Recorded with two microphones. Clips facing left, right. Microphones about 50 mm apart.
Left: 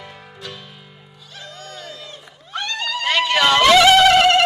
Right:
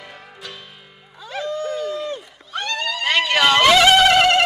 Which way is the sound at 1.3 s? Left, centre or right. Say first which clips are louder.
Right 12 dB; right.